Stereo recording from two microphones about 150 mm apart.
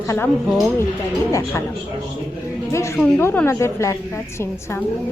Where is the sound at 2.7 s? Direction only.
20° left (ahead or behind).